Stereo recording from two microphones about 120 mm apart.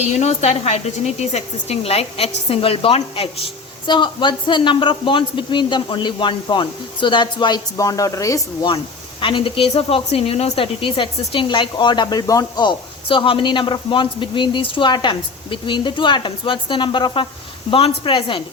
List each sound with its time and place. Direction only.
0.0 s speech: 70° left (ahead or behind); by 8.4 s 25° left (ahead or behind)
9.2 s speech: 45° left (ahead or behind)
13.1 s speech: 45° left (ahead or behind)